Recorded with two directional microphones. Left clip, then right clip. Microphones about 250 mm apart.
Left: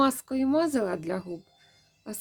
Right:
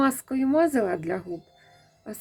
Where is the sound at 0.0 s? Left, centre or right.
Centre.